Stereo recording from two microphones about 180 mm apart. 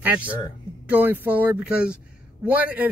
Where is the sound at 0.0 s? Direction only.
10° right (ahead or behind).